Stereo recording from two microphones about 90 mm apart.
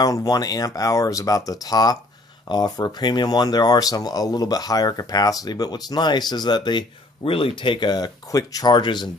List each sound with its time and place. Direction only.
0.0 s speech: 45° left (ahead or behind)
7.2 s speech: 80° left; by 8.7 s 45° left (ahead or behind)
8.7 s speech: 55° left (ahead or behind)